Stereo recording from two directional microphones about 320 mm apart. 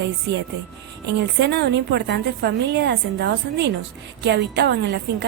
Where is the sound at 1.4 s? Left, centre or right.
Right.